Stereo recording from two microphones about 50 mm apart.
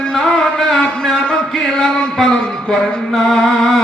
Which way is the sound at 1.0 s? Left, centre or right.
Centre.